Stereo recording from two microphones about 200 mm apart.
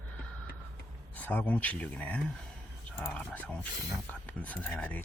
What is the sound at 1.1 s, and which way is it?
Speech, 10° left (ahead or behind).